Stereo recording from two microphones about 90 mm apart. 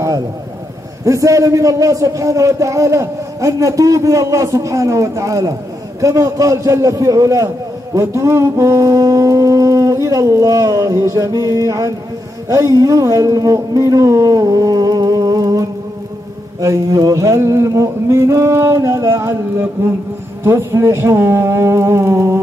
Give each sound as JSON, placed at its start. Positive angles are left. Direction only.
{"t": 1.0, "sound": "a man's voice", "side_deg": -35}
{"t": 20.4, "sound": "speech", "side_deg": -30}